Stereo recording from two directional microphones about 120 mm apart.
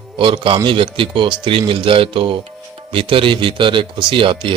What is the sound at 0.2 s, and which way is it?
A man's voice, 45° right (ahead or behind).